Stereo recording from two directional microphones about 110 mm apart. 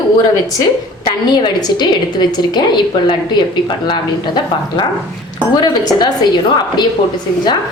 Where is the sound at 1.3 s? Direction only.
40° left (ahead or behind).